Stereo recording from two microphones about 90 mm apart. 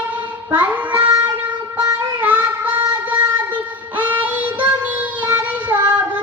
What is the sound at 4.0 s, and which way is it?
Child singing, 15° right (ahead or behind).